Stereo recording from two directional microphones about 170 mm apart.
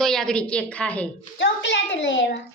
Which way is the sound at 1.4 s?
90° left.